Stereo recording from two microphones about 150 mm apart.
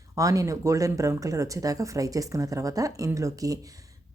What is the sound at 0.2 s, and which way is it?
Speech, 20° right (ahead or behind).